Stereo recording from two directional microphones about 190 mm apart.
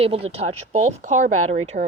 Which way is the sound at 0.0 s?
30° right (ahead or behind).